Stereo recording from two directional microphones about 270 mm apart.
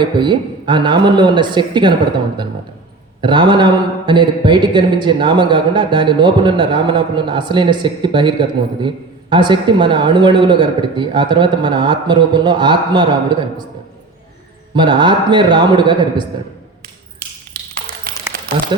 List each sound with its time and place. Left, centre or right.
0.0 s speech: centre
14.8 s speech: centre